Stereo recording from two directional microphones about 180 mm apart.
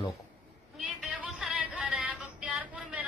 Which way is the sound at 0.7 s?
5° right (ahead or behind).